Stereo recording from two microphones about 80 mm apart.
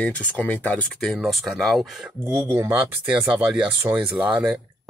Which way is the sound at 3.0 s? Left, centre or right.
Centre.